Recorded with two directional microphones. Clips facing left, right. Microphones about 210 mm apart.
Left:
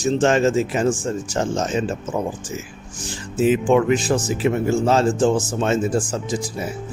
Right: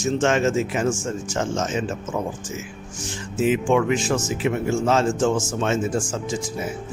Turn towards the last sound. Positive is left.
turn(degrees=35)  # may be behind; listen again after turning